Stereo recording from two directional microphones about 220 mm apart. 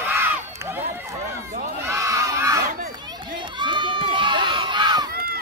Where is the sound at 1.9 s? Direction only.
15° right (ahead or behind).